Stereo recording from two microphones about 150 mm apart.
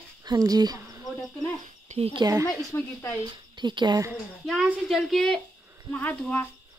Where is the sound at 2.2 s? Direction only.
20° right (ahead or behind).